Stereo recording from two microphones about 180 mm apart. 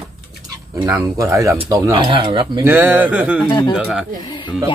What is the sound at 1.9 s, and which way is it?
Speech, 30° right (ahead or behind).